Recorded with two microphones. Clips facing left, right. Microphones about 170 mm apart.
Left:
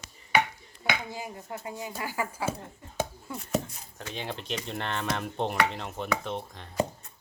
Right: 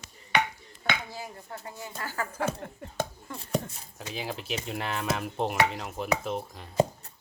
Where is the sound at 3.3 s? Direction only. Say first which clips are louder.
Left 2 dB; 10° left (ahead or behind).